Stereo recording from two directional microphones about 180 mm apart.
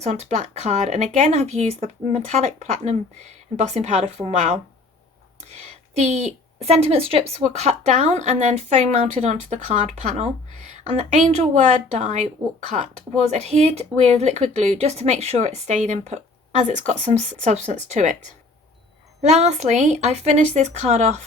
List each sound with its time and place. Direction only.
0.0 s a woman's voice: 40° right (ahead or behind)
13.3 s a woman's voice: 35° right (ahead or behind)